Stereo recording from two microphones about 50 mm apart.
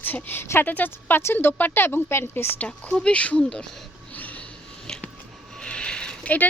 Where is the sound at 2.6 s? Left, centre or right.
Left.